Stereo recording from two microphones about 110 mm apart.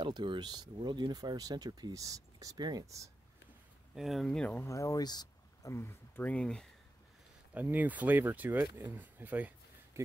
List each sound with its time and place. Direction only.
0.0 s speech: 45° right (ahead or behind)
3.9 s speech: centre (ahead or behind)
4.6 s speech: 30° left (ahead or behind)
5.7 s speech: 25° left (ahead or behind); by 6.7 s 5° left (ahead or behind)
7.5 s speech: 15° right (ahead or behind)
9.9 s a sound: 25° right (ahead or behind)